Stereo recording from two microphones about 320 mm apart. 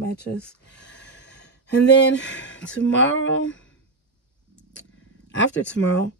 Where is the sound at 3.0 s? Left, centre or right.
Left.